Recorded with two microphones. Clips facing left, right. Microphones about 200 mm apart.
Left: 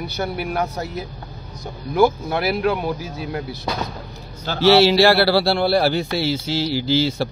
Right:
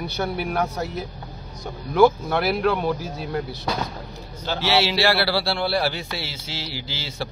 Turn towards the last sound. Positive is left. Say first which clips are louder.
# left 12 dB
turn(degrees=40)  # may be behind; listen again after turning